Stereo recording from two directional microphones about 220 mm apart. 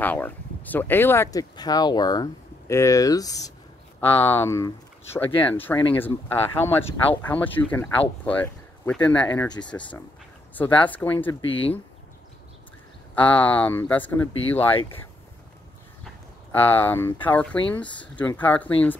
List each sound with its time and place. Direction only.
0.0 s speech: 5° left (ahead or behind)
11.4 s speech: 25° left (ahead or behind)
13.1 s speech: 5° left (ahead or behind)
16.5 s speech: 10° left (ahead or behind)